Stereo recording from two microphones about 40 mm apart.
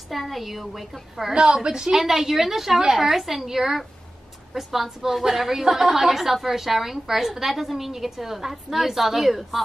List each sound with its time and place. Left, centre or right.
0.1 s a woman's voice: centre
1.3 s a woman's voice: right; by 9.6 s centre